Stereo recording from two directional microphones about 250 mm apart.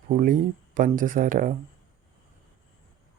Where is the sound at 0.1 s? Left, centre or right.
Right.